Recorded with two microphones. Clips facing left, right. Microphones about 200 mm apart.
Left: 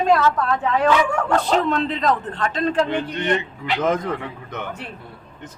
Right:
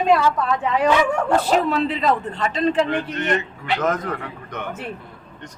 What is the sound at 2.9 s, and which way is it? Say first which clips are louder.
Speech: left 1 dB; 30° left (ahead or behind).